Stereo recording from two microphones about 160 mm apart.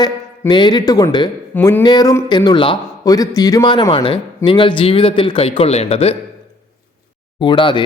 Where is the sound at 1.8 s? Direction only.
25° left (ahead or behind).